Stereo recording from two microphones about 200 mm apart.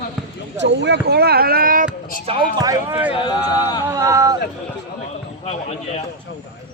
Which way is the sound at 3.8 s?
15° right (ahead or behind).